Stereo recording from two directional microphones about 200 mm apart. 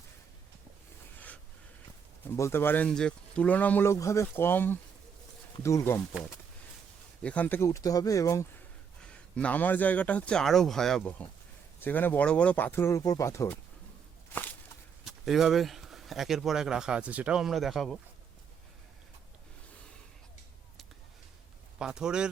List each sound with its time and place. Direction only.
2.2 s speech: 10° left (ahead or behind)
7.2 s speech: 5° left (ahead or behind)
9.0 s speech: 5° left (ahead or behind)
15.0 s speech: centre (ahead or behind)
21.8 s speech: 5° right (ahead or behind)